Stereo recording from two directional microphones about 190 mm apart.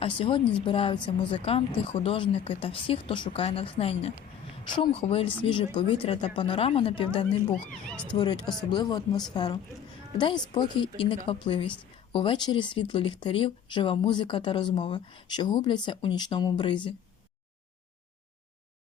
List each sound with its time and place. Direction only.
0.0 s speech: 25° left (ahead or behind)